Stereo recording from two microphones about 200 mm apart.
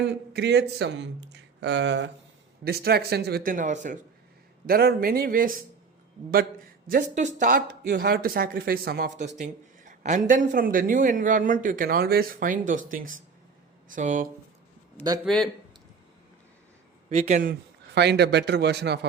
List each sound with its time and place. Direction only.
0.0 s speech: 55° right (ahead or behind)
2.6 s speech: 50° right (ahead or behind)
7.1 s speech: 35° right (ahead or behind)
9.1 s speech: 35° right (ahead or behind)
15.2 s speech: 5° left (ahead or behind)
17.1 s speech: 35° right (ahead or behind)
17.9 s speech: 55° right (ahead or behind)